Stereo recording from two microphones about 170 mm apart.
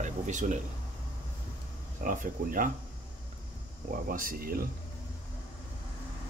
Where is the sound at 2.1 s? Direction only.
50° right (ahead or behind).